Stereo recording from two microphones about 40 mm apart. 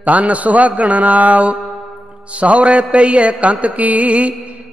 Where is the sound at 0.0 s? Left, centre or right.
Right.